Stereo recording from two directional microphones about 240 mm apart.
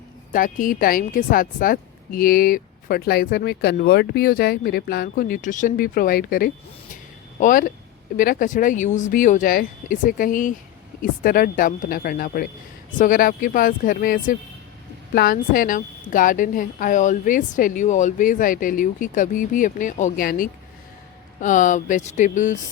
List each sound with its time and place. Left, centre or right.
0.3 s a woman's voice: left
6.9 s a sound: left
8.1 s a woman's voice: left